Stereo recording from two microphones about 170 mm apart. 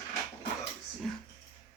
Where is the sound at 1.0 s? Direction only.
Centre (ahead or behind).